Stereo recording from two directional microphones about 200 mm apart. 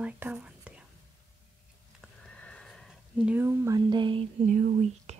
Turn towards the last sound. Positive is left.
turn(degrees=-35)  # may be behind; listen again after turning